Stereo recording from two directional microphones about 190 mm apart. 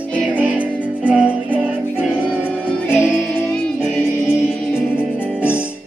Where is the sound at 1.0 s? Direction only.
5° right (ahead or behind).